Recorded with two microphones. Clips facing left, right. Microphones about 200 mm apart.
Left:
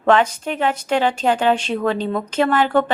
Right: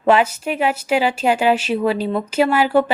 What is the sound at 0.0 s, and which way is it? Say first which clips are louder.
Speech: right 1 dB; 10° right (ahead or behind).